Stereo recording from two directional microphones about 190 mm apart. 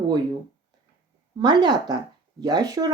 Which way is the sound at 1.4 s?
20° right (ahead or behind).